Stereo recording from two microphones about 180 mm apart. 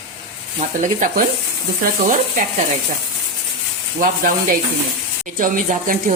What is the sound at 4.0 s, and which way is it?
Speech, 50° right (ahead or behind).